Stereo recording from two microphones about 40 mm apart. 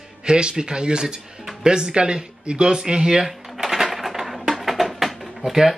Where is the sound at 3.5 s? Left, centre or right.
Centre.